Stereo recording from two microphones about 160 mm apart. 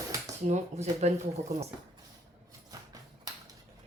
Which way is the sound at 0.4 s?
45° right (ahead or behind).